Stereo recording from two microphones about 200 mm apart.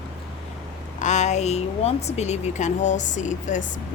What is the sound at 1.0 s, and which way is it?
A woman's voice, 35° left (ahead or behind).